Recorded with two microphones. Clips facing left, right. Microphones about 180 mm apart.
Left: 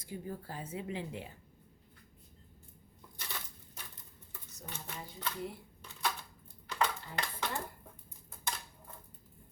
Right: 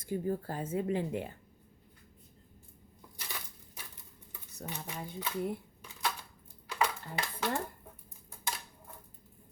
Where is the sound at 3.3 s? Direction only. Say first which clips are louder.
Even; 10° right (ahead or behind).